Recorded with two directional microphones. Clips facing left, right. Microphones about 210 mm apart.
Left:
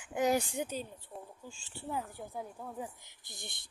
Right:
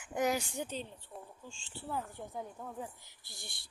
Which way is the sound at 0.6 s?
10° left (ahead or behind).